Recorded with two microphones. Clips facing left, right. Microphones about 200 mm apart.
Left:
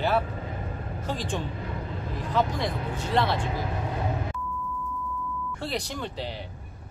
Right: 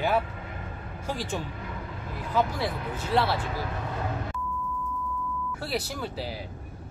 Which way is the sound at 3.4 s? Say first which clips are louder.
Left 2 dB; 20° left (ahead or behind).